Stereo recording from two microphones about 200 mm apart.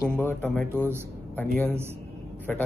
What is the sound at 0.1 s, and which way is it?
Speech, 10° left (ahead or behind).